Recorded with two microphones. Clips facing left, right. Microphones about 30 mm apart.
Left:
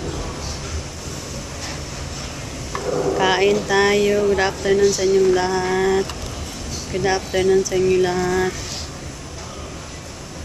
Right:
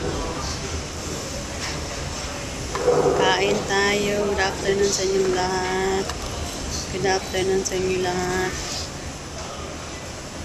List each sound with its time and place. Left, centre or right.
2.9 s boat: right
3.2 s boat: centre
3.6 s speech: centre